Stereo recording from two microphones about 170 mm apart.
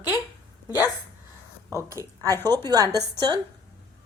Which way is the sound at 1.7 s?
20° right (ahead or behind).